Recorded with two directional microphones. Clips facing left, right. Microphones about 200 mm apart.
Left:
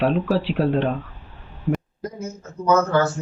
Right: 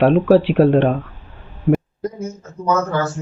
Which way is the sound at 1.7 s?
70° right (ahead or behind).